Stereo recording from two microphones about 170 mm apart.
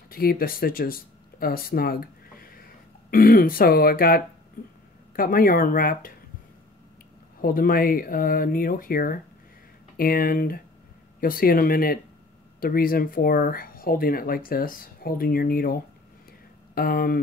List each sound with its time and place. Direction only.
0.1 s speech: 60° left (ahead or behind)
1.4 s a sound: 60° left (ahead or behind)
3.1 s speech: 55° left (ahead or behind)
7.4 s speech: 55° left (ahead or behind)